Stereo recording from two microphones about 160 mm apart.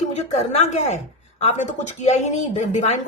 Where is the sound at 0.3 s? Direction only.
45° left (ahead or behind).